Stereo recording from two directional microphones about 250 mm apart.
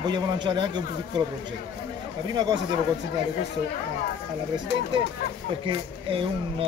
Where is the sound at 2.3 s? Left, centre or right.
Centre.